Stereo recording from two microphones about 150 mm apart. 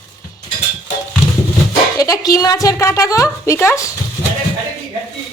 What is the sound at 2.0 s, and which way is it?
A woman's voice, 25° left (ahead or behind).